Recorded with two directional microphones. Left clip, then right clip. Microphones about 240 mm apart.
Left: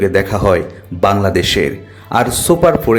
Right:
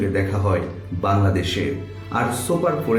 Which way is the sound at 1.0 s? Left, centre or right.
Left.